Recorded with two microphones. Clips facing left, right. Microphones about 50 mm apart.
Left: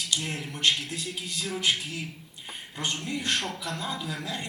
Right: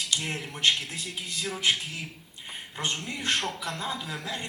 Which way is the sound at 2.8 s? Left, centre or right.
Right.